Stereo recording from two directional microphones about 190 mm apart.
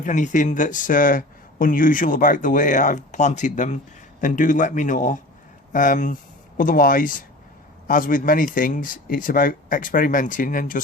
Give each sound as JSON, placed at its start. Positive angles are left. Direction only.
{"t": 0.0, "sound": "speech", "side_deg": 40}